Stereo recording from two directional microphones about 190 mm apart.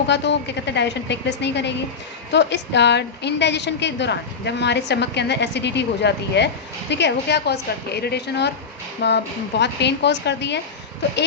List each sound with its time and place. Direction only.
0.1 s a woman's voice: 65° left (ahead or behind)